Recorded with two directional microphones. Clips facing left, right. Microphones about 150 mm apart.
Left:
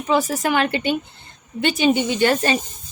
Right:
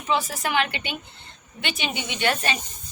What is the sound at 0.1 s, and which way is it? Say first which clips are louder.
A woman's voice: left 5 dB; 45° left (ahead or behind).